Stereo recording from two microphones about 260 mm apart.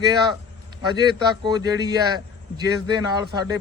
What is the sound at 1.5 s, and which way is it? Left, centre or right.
Speech, centre.